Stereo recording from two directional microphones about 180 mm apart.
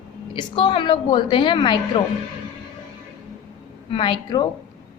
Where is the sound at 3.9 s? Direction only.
25° left (ahead or behind).